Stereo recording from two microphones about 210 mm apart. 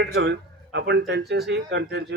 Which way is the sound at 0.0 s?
55° right (ahead or behind).